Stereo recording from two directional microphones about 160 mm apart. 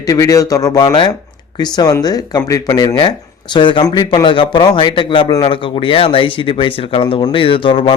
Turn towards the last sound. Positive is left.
turn(degrees=35)  # may be behind; listen again after turning